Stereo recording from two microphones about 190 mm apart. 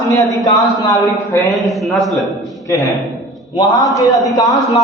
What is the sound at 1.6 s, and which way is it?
Speech, centre (ahead or behind).